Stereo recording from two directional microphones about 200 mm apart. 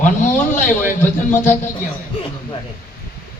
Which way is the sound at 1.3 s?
10° left (ahead or behind).